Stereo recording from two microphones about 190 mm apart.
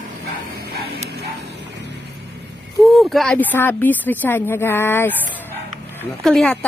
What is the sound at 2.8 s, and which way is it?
A woman's voice, centre (ahead or behind).